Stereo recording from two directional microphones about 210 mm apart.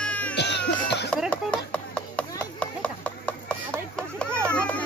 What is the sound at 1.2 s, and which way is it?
Chop, 5° left (ahead or behind).